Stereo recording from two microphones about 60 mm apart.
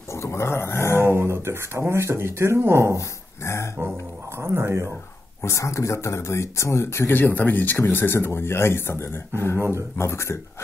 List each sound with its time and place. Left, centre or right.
0.1 s dog: left
1.0 s speech: right
3.0 s dog: left
4.4 s speech: right
5.4 s speech: left
7.1 s speech: left
9.6 s speech: right
9.9 s speech: left